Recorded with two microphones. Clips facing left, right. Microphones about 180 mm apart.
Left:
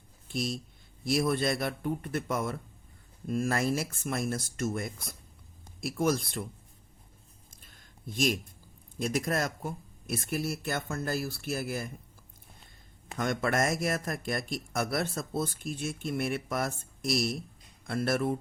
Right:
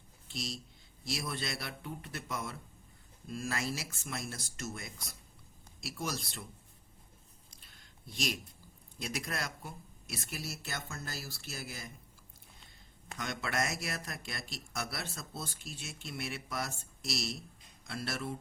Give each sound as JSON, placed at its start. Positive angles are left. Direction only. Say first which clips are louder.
{"t": 0.3, "sound": "a man's voice", "louder": "left 8 dB", "side_deg": 55}
{"t": 7.5, "sound": "a sound", "louder": "left 4 dB", "side_deg": 50}
{"t": 9.0, "sound": "speech", "louder": "left 9 dB", "side_deg": 50}
{"t": 13.1, "sound": "a man's voice", "louder": "left 8 dB", "side_deg": 50}